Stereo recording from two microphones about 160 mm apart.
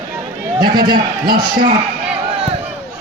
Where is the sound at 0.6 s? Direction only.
70° right (ahead or behind).